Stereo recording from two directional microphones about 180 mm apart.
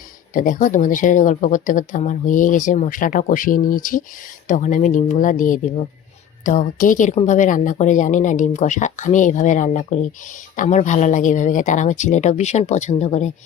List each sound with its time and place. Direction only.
0.3 s a woman's voice: 50° left (ahead or behind)